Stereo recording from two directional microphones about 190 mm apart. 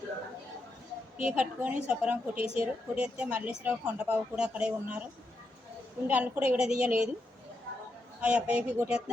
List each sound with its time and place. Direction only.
1.2 s a woman's voice: 5° right (ahead or behind)
6.1 s a woman's voice: 10° right (ahead or behind)
8.2 s a woman's voice: 5° right (ahead or behind)